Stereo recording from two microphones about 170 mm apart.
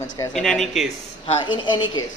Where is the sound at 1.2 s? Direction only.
30° left (ahead or behind).